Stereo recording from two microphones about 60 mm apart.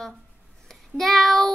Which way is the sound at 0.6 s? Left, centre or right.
Centre.